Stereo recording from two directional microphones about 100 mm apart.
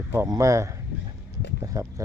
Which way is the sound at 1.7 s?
30° right (ahead or behind).